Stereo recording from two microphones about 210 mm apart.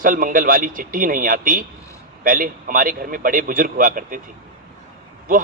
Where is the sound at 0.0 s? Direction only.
40° right (ahead or behind).